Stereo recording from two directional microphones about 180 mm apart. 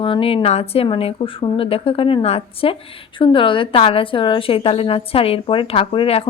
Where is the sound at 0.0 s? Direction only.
30° left (ahead or behind).